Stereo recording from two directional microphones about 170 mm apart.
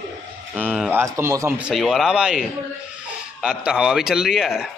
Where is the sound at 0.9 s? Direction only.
15° right (ahead or behind).